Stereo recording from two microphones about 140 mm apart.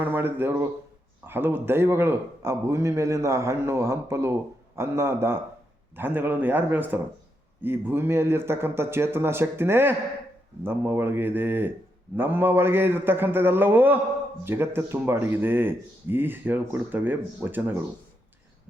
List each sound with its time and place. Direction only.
0.0 s a man's voice: 15° right (ahead or behind)